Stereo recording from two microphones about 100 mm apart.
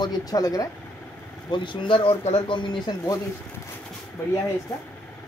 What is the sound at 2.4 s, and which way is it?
Speech, 55° left (ahead or behind).